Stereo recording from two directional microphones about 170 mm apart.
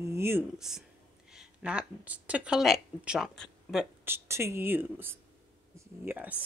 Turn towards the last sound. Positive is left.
turn(degrees=-10)  # may be behind; listen again after turning